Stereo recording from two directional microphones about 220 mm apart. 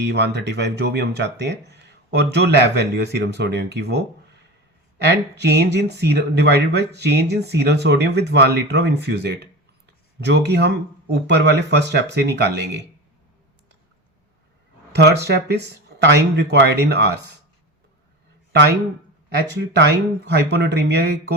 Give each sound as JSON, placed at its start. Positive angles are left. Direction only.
{"t": 0.0, "sound": "speech", "side_deg": -50}
{"t": 5.4, "sound": "speech", "side_deg": -50}
{"t": 15.3, "sound": "speech", "side_deg": -50}
{"t": 18.5, "sound": "speech", "side_deg": -50}